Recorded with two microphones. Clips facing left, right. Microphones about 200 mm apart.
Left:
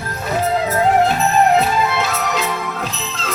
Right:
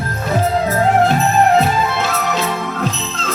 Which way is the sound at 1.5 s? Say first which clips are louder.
Right 1 dB; centre (ahead or behind).